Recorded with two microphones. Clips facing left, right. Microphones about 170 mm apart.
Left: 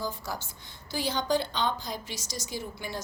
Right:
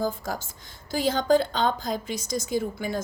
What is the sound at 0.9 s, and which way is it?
Speech, 90° right.